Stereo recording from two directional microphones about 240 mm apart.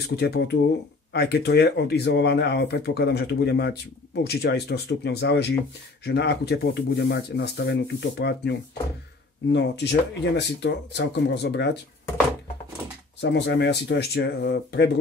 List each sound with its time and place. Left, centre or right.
0.0 s speech: left
13.2 s speech: left